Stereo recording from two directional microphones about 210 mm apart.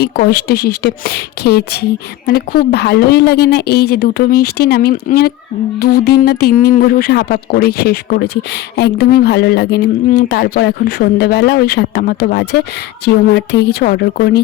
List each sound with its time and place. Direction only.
0.0 s speech: 50° left (ahead or behind)